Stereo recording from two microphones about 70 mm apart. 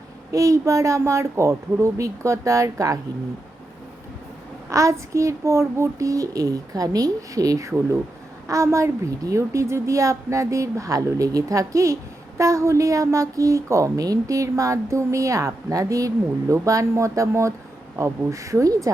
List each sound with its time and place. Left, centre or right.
0.3 s a woman's voice: right
4.7 s a woman's voice: right